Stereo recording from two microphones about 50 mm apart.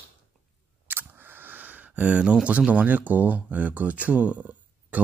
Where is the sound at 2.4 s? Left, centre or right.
Right.